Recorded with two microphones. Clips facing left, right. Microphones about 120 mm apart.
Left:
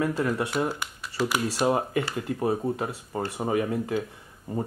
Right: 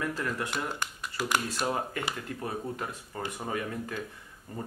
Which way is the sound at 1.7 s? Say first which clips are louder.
Left 7 dB; 25° left (ahead or behind).